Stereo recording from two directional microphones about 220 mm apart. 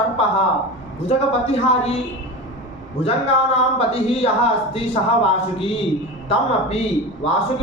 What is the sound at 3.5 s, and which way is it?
Speech, 25° left (ahead or behind).